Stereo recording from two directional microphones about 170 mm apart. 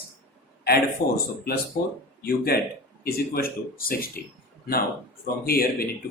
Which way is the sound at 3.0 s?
60° left (ahead or behind).